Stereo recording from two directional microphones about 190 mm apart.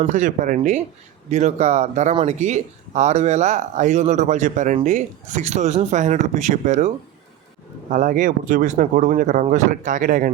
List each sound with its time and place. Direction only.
0.0 s speech: 40° right (ahead or behind)